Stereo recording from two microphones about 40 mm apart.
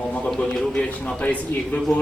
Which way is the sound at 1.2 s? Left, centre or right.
Left.